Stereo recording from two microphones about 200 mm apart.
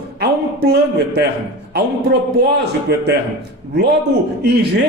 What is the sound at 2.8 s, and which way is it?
Speech, 55° right (ahead or behind).